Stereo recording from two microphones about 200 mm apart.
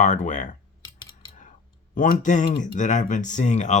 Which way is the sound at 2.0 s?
40° left (ahead or behind).